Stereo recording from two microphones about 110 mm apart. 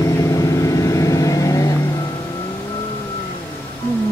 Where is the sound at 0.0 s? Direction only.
30° left (ahead or behind).